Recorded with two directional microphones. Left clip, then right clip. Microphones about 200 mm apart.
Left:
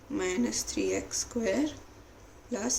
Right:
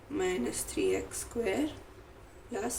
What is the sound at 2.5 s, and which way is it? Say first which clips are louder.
Speech: left 2 dB; 35° left (ahead or behind).